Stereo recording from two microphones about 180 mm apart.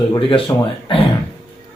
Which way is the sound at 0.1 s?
30° left (ahead or behind).